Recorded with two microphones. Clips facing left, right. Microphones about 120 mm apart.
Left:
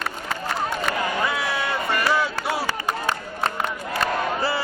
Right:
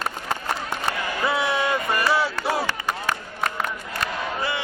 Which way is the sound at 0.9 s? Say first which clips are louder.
Right 2 dB; 25° right (ahead or behind).